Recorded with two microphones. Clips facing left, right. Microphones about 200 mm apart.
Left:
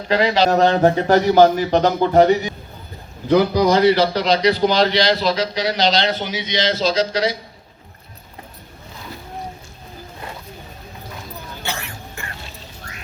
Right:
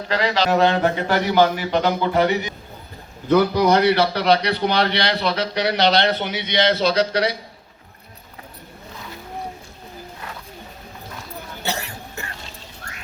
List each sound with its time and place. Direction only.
0.1 s speech: 15° left (ahead or behind)
0.6 s speech: 45° left (ahead or behind)
3.6 s a man's voice: 60° right (ahead or behind)
11.6 s cough: 40° right (ahead or behind)